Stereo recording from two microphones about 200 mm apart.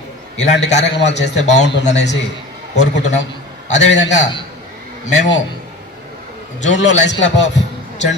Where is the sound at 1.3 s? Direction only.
35° left (ahead or behind).